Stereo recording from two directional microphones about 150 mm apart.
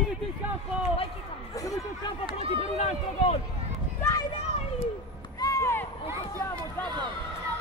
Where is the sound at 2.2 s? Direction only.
35° right (ahead or behind).